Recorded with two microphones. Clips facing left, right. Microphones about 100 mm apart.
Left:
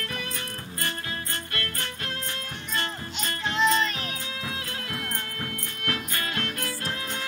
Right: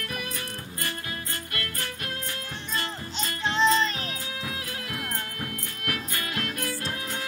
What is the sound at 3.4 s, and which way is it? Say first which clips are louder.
Music: right 1 dB; 30° right (ahead or behind).